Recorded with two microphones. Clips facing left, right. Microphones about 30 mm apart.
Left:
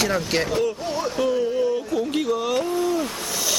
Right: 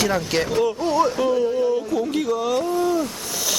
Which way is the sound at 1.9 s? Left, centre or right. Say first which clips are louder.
Right 1 dB; centre.